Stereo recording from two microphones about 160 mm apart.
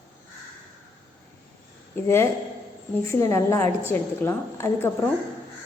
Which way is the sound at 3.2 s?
15° left (ahead or behind).